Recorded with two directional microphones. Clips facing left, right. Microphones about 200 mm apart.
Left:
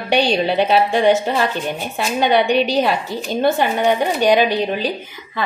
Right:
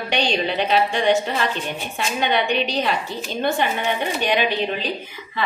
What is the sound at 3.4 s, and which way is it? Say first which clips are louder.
A woman's voice: left 6 dB; 40° left (ahead or behind).